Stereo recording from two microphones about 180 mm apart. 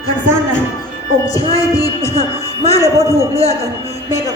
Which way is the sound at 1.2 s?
20° left (ahead or behind).